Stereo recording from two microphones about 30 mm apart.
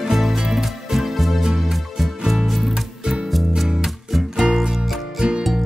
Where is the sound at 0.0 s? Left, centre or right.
Centre.